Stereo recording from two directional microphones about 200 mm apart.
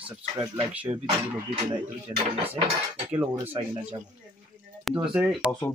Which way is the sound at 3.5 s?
30° right (ahead or behind).